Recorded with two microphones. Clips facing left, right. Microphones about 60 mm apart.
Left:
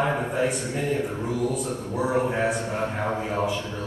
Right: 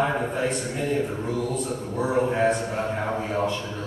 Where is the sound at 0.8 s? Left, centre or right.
Centre.